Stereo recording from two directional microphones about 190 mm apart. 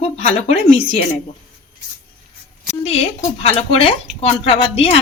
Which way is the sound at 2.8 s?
30° left (ahead or behind).